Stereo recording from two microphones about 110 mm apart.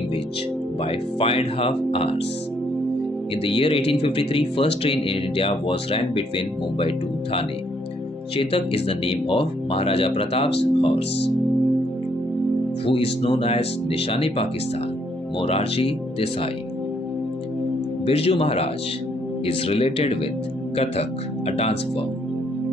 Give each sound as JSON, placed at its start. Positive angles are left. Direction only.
{"t": 0.8, "sound": "speech", "side_deg": 60}
{"t": 3.4, "sound": "speech", "side_deg": 55}
{"t": 8.4, "sound": "speech", "side_deg": 55}
{"t": 12.8, "sound": "speech", "side_deg": 55}
{"t": 18.0, "sound": "speech", "side_deg": 60}